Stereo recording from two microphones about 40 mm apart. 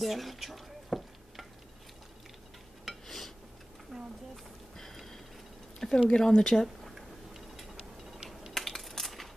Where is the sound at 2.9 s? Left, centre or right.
Centre.